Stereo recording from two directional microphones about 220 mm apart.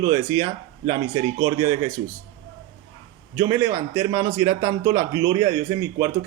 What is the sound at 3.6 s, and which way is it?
Speech, 10° right (ahead or behind).